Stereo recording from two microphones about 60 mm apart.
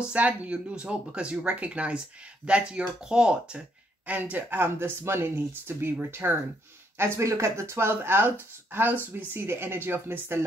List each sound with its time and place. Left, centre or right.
0.1 s speech: right
4.1 s speech: right
7.0 s speech: right